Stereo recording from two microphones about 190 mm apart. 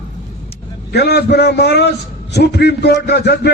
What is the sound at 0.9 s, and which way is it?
A man's voice, 60° left (ahead or behind).